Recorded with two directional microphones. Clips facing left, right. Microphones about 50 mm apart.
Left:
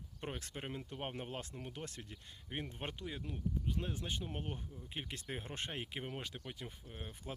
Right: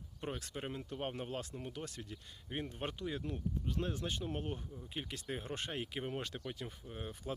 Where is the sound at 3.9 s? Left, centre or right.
Centre.